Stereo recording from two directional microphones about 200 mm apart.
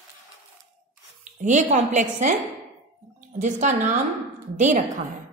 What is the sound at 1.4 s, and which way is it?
Speech, 35° right (ahead or behind).